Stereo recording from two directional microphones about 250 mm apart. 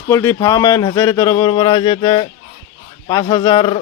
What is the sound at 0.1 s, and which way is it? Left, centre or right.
Speech, centre.